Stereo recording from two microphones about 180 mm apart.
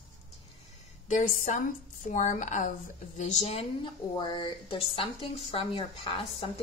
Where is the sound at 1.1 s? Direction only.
45° left (ahead or behind).